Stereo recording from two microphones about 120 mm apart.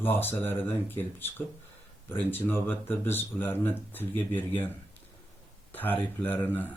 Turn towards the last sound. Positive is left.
turn(degrees=15)  # may be behind; listen again after turning